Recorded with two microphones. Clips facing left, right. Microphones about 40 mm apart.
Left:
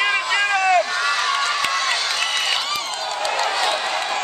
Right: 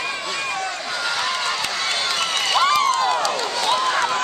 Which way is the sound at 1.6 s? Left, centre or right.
Left.